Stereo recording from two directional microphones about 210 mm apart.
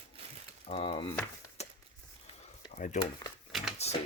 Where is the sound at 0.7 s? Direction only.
25° left (ahead or behind).